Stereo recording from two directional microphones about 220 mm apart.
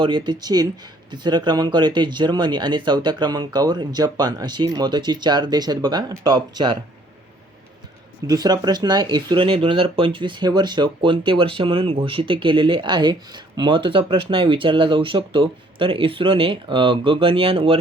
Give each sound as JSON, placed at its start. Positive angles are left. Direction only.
{"t": 0.0, "sound": "speech", "side_deg": -20}
{"t": 8.3, "sound": "speech", "side_deg": -20}